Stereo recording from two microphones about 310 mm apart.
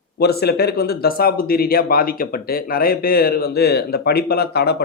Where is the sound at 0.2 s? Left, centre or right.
Left.